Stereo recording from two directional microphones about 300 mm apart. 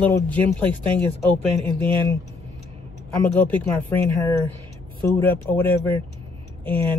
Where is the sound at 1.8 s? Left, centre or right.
Centre.